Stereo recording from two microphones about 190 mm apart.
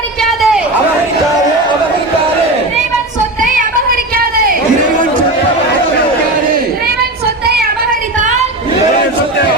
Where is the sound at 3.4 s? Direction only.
45° right (ahead or behind).